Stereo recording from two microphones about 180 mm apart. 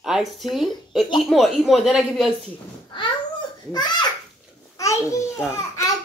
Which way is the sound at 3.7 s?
25° left (ahead or behind).